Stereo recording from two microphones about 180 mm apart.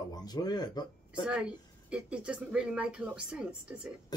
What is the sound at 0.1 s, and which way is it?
Speech, 20° left (ahead or behind).